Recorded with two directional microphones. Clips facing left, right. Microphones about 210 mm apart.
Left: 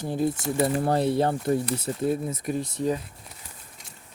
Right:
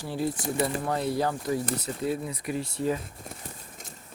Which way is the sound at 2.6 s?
20° left (ahead or behind).